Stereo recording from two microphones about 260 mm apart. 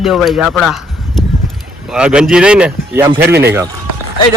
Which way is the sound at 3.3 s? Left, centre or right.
Right.